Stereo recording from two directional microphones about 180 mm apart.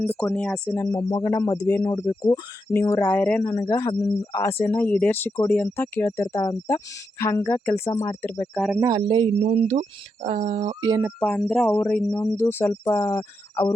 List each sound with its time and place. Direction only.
0.0 s speech: 10° left (ahead or behind)
0.8 s speech: 15° left (ahead or behind)
8.8 s speech: 25° right (ahead or behind)
11.2 s speech: 5° left (ahead or behind)